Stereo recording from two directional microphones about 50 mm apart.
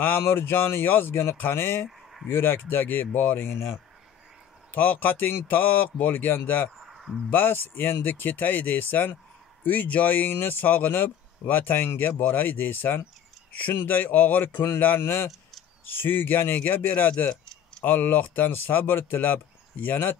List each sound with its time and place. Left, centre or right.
0.2 s speech: left
3.3 s speech: left
4.7 s speech: left
6.9 s a sound: centre
7.2 s speech: left
15.0 s speech: left
15.9 s speech: left